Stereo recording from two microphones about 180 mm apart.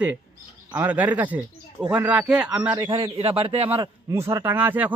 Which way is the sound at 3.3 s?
35° right (ahead or behind).